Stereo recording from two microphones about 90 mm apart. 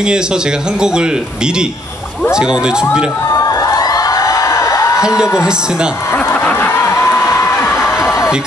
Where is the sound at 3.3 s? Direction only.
40° left (ahead or behind).